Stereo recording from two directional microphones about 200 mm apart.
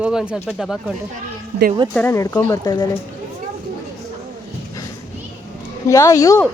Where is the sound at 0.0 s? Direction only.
5° right (ahead or behind).